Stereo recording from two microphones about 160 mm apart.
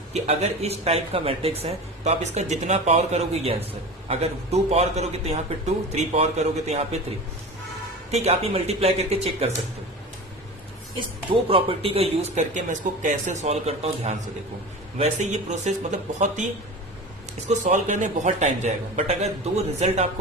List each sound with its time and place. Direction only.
0.1 s speech: 45° right (ahead or behind)
8.1 s speech: 40° right (ahead or behind)
11.4 s speech: 35° right (ahead or behind)
17.5 s speech: 50° right (ahead or behind)